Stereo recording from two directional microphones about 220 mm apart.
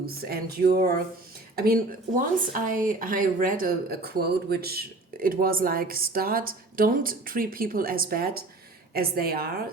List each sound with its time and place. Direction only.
0.0 s a woman's voice: 45° right (ahead or behind)